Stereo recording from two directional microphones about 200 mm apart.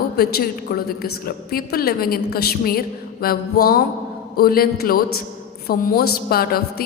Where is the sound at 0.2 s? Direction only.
50° left (ahead or behind).